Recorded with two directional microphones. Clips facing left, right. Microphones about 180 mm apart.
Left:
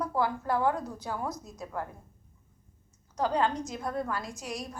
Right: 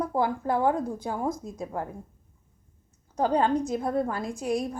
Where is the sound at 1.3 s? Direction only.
50° right (ahead or behind).